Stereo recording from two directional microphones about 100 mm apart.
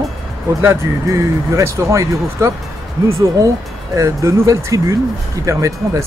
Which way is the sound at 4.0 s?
30° right (ahead or behind).